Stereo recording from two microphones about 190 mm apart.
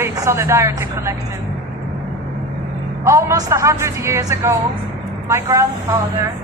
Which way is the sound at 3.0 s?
15° right (ahead or behind).